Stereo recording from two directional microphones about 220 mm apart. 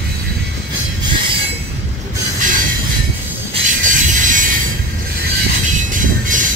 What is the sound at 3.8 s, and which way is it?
Mechanisms, 35° right (ahead or behind).